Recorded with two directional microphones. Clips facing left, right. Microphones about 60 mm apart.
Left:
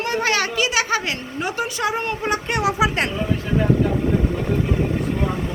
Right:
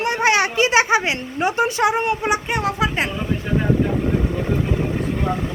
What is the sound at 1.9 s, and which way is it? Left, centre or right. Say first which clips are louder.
Speech: right 3 dB; centre.